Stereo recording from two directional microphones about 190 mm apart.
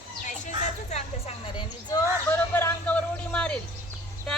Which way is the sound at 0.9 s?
30° left (ahead or behind).